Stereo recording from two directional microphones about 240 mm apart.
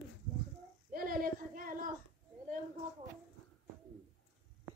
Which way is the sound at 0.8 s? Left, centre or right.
Right.